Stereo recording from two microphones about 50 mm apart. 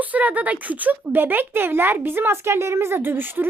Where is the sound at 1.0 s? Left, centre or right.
Right.